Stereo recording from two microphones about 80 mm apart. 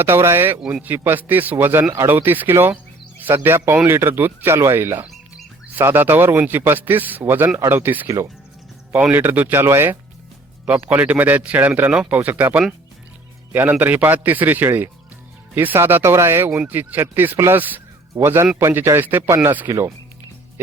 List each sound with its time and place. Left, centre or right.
0.0 s speech: right
9.1 s speech: right
11.9 s speech: centre
12.1 s speech: right